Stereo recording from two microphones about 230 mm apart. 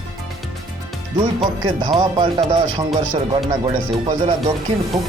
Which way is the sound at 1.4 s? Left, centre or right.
Right.